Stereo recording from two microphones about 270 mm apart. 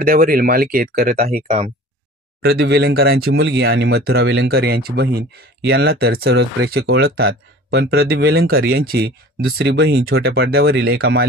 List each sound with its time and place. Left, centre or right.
0.0 s speech: right
2.4 s speech: right